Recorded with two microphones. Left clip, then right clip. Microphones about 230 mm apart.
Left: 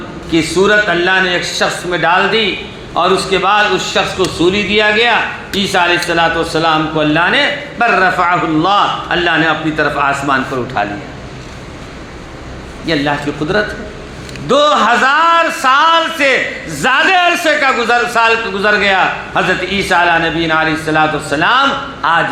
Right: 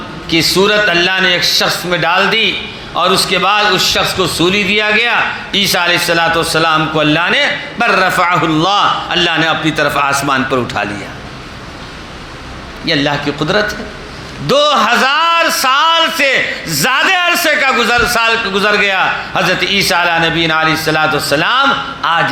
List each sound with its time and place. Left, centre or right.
0.3 s a man's voice: right
12.8 s a man's voice: right